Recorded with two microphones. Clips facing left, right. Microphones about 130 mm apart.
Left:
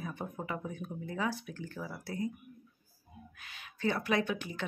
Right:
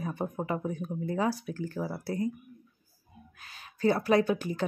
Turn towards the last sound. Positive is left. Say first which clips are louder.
# right 7 dB
turn(degrees=-40)  # may be behind; listen again after turning